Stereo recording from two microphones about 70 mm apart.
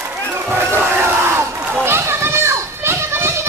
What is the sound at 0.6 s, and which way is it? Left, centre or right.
Crowd, right.